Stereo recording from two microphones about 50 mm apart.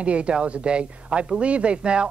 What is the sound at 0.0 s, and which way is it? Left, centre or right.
Speech, right.